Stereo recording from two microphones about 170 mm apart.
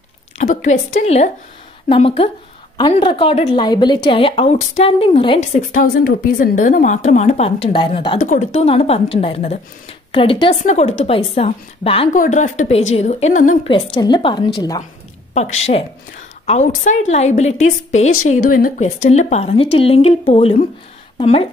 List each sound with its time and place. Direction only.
0.4 s a woman's voice: 45° left (ahead or behind)
5.7 s a woman's voice: 55° left (ahead or behind); by 8.2 s 30° left (ahead or behind)
8.2 s a woman's voice: 45° left (ahead or behind)
10.6 s a woman's voice: 40° left (ahead or behind)
12.1 s a woman's voice: 45° left (ahead or behind)
14.0 s a woman's voice: 25° left (ahead or behind)
15.3 s a woman's voice: 40° left (ahead or behind)